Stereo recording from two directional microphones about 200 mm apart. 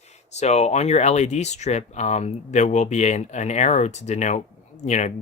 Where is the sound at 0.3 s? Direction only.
35° left (ahead or behind).